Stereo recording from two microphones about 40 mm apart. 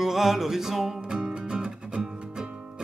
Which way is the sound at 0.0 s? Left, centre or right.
Centre.